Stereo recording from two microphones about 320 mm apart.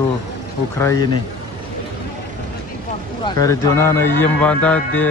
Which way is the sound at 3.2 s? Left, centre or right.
Centre.